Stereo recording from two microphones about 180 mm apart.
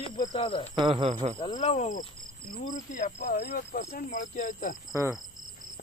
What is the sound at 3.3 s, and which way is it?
Speech, 65° left (ahead or behind).